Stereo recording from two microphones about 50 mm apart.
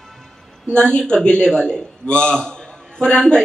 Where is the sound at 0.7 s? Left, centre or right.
Centre.